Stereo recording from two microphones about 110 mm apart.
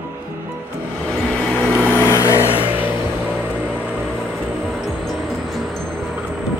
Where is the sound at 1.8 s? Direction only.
20° left (ahead or behind).